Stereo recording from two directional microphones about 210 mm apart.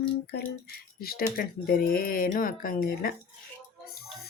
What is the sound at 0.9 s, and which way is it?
Speech, 45° left (ahead or behind).